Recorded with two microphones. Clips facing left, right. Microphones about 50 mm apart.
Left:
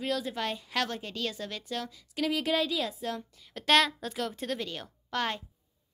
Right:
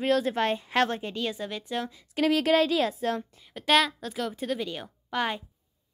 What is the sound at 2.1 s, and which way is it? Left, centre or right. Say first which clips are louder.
A woman's voice: right 6 dB; right.